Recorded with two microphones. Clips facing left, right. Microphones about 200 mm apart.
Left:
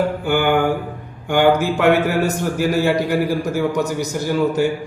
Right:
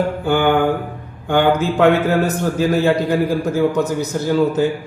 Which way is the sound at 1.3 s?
15° left (ahead or behind).